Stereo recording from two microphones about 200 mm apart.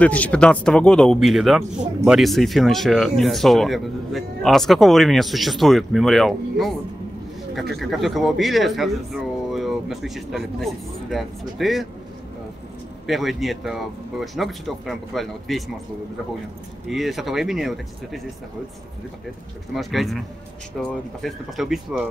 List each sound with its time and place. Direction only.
0.0 s speech: 5° left (ahead or behind)
7.7 s speech: centre (ahead or behind)
13.0 s speech: centre (ahead or behind)
16.9 s speech: centre (ahead or behind)
19.7 s speech: centre (ahead or behind)